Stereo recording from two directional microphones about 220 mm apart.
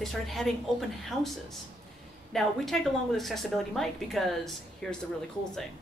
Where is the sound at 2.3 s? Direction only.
Centre (ahead or behind).